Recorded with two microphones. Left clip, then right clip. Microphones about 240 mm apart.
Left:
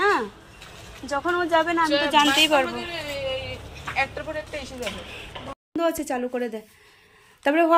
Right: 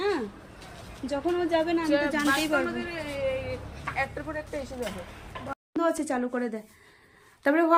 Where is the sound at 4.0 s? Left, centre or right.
Right.